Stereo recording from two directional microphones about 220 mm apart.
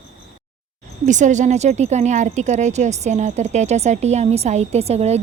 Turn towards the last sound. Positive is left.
turn(degrees=-30)  # may be behind; listen again after turning